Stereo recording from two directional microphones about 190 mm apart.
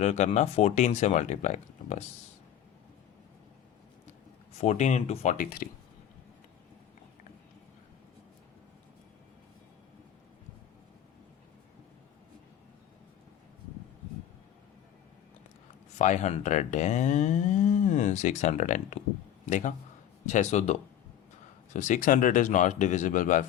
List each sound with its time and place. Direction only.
0.0 s speech: 35° left (ahead or behind)
4.5 s speech: 35° left (ahead or behind)
16.0 s speech: 40° left (ahead or behind)